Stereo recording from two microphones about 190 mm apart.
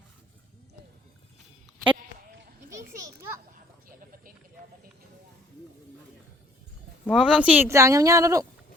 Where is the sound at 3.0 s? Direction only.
15° right (ahead or behind).